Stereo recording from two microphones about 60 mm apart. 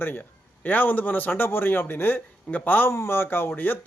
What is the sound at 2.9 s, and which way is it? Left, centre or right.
Speech, left.